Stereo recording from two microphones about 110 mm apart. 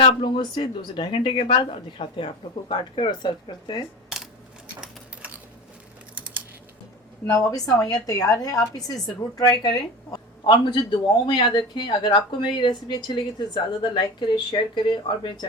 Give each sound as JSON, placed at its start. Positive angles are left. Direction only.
{"t": 0.0, "sound": "speech", "side_deg": 45}
{"t": 4.8, "sound": "a sound", "side_deg": -10}
{"t": 7.3, "sound": "a woman's voice", "side_deg": 30}